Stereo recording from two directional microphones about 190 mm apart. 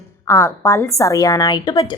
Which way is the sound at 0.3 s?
15° left (ahead or behind).